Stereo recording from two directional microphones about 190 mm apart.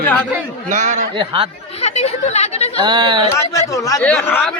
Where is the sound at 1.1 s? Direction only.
25° right (ahead or behind).